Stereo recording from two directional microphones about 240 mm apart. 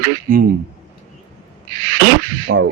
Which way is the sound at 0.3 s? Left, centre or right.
Right.